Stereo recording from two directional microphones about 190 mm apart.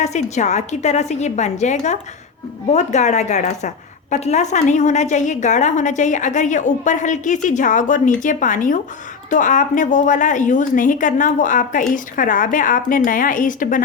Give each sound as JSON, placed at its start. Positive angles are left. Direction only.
{"t": 0.0, "sound": "a woman's voice", "side_deg": 35}